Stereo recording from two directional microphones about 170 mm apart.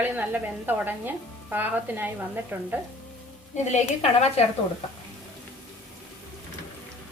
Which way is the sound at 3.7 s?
40° left (ahead or behind).